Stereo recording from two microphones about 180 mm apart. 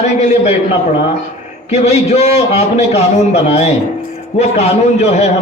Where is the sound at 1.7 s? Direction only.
35° left (ahead or behind).